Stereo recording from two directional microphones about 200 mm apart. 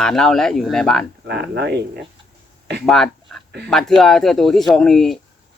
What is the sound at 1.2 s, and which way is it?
Speech, 55° right (ahead or behind).